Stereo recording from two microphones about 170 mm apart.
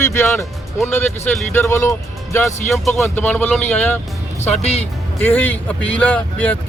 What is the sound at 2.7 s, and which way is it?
Speech, centre (ahead or behind).